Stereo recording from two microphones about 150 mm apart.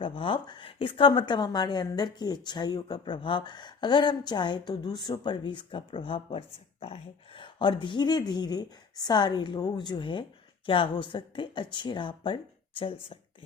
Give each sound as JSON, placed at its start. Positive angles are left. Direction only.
{"t": 0.0, "sound": "a woman's voice", "side_deg": 35}